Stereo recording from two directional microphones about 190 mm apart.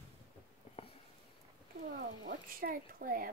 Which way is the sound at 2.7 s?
45° right (ahead or behind).